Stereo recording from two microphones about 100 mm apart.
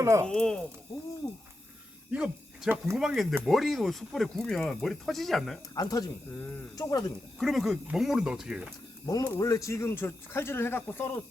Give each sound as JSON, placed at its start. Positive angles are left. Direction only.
{"t": 0.0, "sound": "speech", "side_deg": -30}
{"t": 0.3, "sound": "speech", "side_deg": 5}
{"t": 2.0, "sound": "speech", "side_deg": -10}
{"t": 2.9, "sound": "speech", "side_deg": 0}
{"t": 5.7, "sound": "speech", "side_deg": 40}
{"t": 6.3, "sound": "speech", "side_deg": 15}
{"t": 6.7, "sound": "speech", "side_deg": 35}
{"t": 7.3, "sound": "speech", "side_deg": 0}
{"t": 9.0, "sound": "speech", "side_deg": 40}